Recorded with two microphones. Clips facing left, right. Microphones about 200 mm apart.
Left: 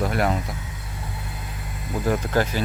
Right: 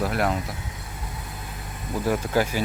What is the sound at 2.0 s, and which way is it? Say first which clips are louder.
Speech: left 1 dB; 10° right (ahead or behind).